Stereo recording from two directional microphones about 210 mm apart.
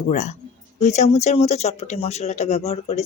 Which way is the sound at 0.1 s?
35° left (ahead or behind).